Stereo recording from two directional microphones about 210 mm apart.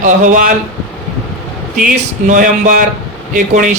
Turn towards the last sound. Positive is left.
turn(degrees=-35)  # may be behind; listen again after turning